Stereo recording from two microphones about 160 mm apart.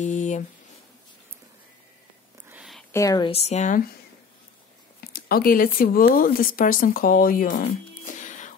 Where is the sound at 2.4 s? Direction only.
5° right (ahead or behind).